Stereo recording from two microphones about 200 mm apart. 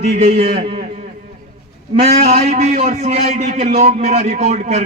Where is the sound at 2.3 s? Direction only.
30° right (ahead or behind).